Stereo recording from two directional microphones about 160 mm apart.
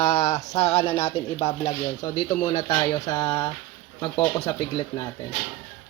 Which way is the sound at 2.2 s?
25° left (ahead or behind).